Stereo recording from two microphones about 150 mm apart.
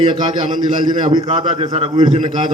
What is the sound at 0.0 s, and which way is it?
A man's voice, 30° right (ahead or behind).